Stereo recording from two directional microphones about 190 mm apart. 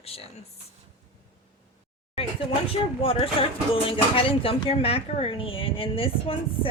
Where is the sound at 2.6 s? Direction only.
30° left (ahead or behind).